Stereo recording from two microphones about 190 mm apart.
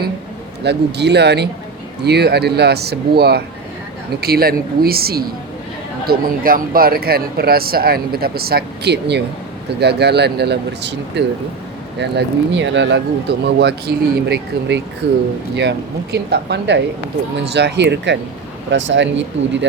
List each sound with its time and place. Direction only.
0.6 s speech: 60° right (ahead or behind)